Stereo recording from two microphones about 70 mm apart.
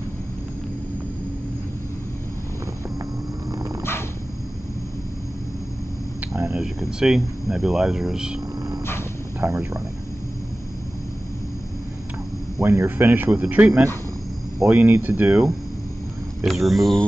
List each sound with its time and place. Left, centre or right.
6.5 s speech: centre
9.4 s speech: right
12.5 s speech: right
14.7 s speech: right
16.4 s speech: centre